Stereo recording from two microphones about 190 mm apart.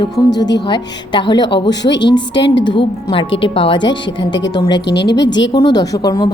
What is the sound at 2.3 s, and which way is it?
Speech, 70° left (ahead or behind).